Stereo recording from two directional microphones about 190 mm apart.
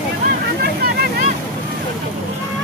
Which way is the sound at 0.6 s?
55° right (ahead or behind).